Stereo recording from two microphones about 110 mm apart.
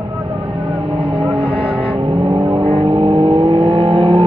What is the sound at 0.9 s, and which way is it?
Vehicle, 60° right (ahead or behind).